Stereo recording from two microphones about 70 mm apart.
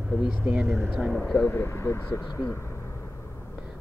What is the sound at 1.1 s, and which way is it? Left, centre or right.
Speech, centre.